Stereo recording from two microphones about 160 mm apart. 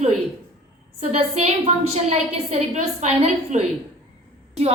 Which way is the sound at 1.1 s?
40° right (ahead or behind).